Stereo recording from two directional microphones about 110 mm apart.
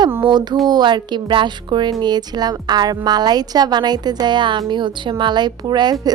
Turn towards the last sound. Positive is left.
turn(degrees=-40)  # may be behind; listen again after turning